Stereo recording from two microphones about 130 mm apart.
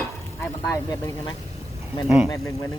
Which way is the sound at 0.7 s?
25° left (ahead or behind).